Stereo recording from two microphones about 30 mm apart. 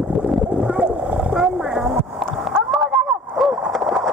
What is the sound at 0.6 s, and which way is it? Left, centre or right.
Boat, right.